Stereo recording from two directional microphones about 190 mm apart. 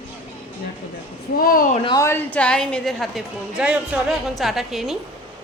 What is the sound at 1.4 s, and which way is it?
Speech, 50° left (ahead or behind).